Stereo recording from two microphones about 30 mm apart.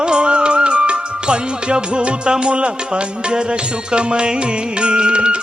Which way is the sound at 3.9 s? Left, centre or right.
Right.